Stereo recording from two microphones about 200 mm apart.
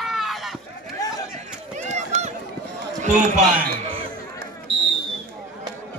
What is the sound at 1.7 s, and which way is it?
Run, 35° right (ahead or behind).